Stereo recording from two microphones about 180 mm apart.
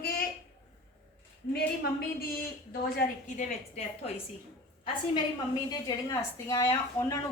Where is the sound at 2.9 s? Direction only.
40° left (ahead or behind).